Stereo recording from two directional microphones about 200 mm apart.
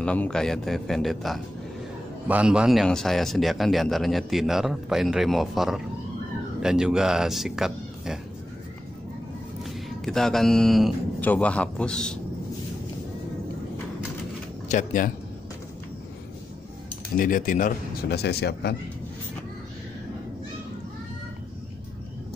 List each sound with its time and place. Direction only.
0.0 s a man's voice: 5° left (ahead or behind)
9.6 s speech: centre (ahead or behind)
14.7 s speech: 40° left (ahead or behind)
17.2 s speech: 40° left (ahead or behind)